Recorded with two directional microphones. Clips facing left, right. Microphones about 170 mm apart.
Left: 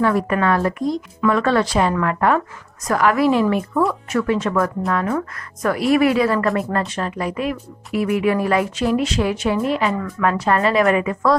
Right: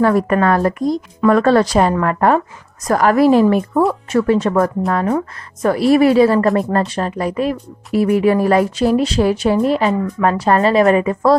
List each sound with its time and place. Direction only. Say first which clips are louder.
0.0 s speech: right 4 dB; 40° right (ahead or behind)